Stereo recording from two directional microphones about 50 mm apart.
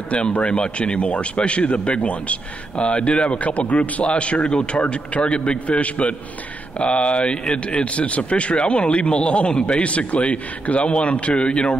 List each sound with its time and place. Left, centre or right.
0.1 s a man's voice: left